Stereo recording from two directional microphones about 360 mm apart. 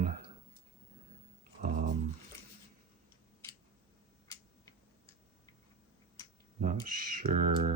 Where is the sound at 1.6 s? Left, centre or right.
Right.